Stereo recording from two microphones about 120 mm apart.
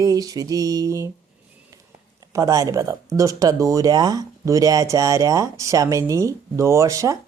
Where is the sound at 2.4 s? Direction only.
25° right (ahead or behind).